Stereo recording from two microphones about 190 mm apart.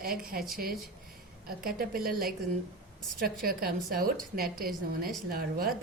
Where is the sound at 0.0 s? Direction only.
50° right (ahead or behind).